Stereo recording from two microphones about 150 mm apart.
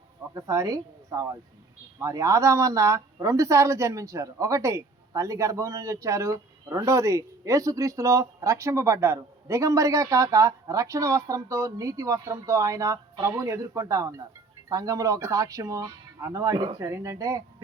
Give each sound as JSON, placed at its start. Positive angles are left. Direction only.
{"t": 0.3, "sound": "speech", "side_deg": -20}